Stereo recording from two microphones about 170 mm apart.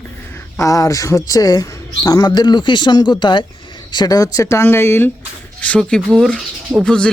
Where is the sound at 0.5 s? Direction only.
20° left (ahead or behind).